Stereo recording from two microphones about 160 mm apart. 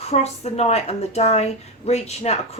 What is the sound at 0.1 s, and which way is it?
A woman's voice, 40° left (ahead or behind).